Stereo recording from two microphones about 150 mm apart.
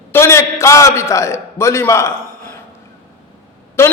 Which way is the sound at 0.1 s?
20° left (ahead or behind).